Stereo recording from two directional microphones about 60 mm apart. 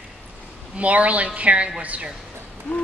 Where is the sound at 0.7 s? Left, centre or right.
Right.